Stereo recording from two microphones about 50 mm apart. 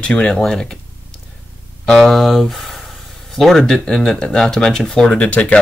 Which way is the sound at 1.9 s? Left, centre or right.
Centre.